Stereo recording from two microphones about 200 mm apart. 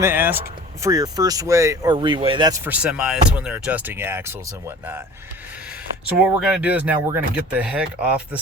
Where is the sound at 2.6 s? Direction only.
5° right (ahead or behind).